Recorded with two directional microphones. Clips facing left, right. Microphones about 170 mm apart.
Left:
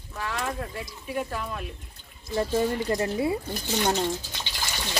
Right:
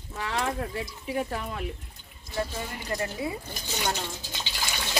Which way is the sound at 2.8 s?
30° left (ahead or behind).